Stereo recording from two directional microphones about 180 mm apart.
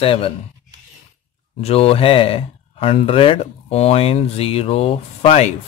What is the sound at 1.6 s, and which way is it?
Speech, 35° left (ahead or behind).